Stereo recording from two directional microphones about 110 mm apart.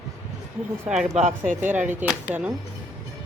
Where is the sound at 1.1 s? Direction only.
90° right.